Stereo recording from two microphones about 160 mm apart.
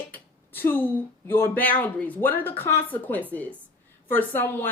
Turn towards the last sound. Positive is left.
turn(degrees=15)  # may be behind; listen again after turning